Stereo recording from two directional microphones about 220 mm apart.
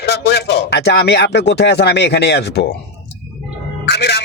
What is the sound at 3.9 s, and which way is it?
Music, 50° left (ahead or behind).